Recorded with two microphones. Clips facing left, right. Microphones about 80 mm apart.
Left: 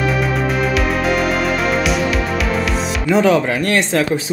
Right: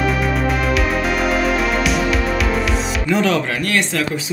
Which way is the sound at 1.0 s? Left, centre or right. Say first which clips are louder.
Left 1 dB; centre.